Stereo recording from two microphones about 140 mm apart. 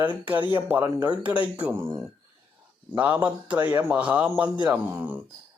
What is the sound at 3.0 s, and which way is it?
Speech, 10° right (ahead or behind).